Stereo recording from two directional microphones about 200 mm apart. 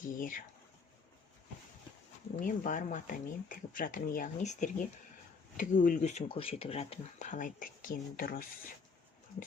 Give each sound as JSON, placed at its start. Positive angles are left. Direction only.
{"t": 0.0, "sound": "speech", "side_deg": 40}
{"t": 2.3, "sound": "speech", "side_deg": 40}